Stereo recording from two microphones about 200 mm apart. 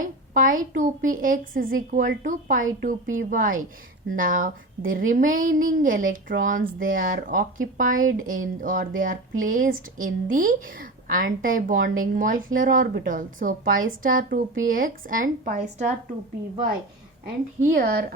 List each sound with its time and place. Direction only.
0.0 s a woman's voice: 40° right (ahead or behind)
17.6 s a woman's voice: 45° right (ahead or behind)